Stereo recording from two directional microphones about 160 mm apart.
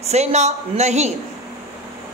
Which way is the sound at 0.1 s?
45° right (ahead or behind).